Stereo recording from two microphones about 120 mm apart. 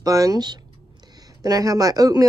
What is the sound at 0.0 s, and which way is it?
Speech, 30° right (ahead or behind).